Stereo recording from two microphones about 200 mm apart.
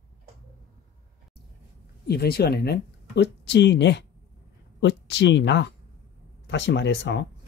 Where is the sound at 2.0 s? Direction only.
50° left (ahead or behind).